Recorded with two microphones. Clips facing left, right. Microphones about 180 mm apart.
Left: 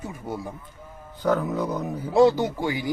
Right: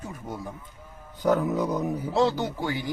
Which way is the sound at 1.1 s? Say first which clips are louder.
Even; 15° right (ahead or behind).